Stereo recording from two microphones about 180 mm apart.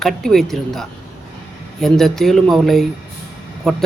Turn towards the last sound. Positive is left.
turn(degrees=0)  # may be behind; listen again after turning